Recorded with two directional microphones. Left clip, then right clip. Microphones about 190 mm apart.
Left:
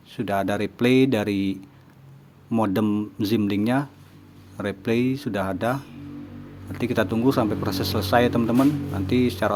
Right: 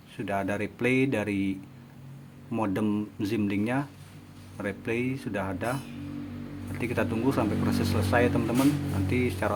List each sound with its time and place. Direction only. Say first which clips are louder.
0.2 s speech: left 6 dB; 30° left (ahead or behind)